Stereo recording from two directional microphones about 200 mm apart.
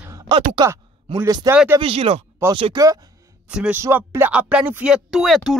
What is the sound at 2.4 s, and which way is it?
Speech, 10° right (ahead or behind).